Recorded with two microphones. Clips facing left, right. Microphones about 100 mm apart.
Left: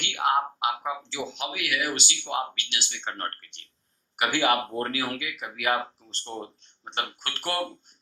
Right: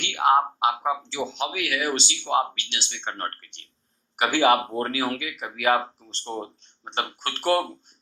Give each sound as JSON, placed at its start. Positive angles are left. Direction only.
{"t": 0.0, "sound": "speech", "side_deg": -30}